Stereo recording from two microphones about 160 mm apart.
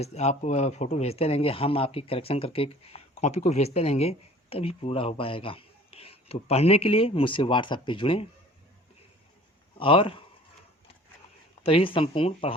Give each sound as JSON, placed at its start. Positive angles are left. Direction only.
{"t": 0.0, "sound": "speech", "side_deg": 45}
{"t": 9.7, "sound": "speech", "side_deg": 35}
{"t": 11.6, "sound": "speech", "side_deg": 35}